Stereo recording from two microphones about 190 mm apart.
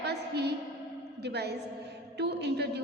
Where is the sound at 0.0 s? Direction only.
60° right (ahead or behind).